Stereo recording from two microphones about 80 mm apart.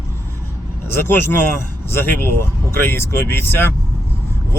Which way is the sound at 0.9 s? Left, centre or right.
Left.